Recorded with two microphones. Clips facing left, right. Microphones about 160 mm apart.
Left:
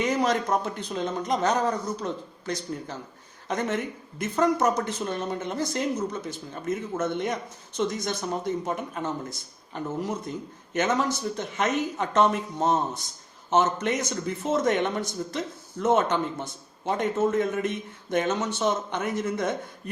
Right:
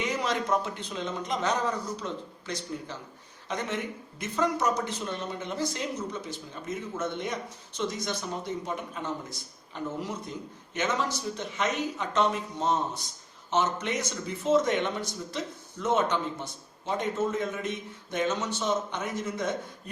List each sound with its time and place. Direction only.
0.0 s a man's voice: 45° left (ahead or behind)